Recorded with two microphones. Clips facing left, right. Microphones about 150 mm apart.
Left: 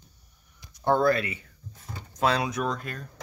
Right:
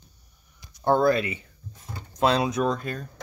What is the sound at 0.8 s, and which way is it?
Speech, 15° right (ahead or behind).